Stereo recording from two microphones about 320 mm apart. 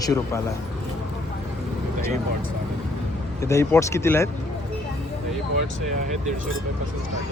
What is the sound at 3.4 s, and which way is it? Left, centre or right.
Speech, centre.